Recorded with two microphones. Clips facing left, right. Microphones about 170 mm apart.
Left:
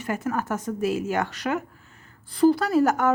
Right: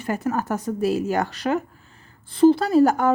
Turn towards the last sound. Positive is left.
turn(degrees=-30)  # may be behind; listen again after turning